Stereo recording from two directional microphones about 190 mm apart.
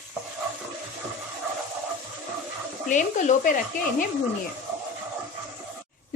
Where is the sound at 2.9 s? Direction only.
40° left (ahead or behind).